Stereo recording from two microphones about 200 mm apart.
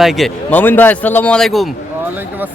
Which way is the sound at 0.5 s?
10° left (ahead or behind).